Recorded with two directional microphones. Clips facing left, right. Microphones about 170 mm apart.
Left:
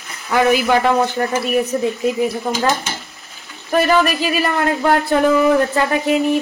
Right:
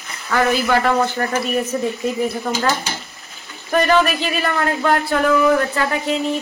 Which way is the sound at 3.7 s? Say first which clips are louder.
Left 1 dB; 5° left (ahead or behind).